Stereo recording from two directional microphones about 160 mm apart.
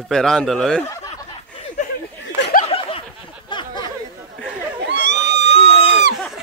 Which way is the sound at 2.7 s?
35° left (ahead or behind).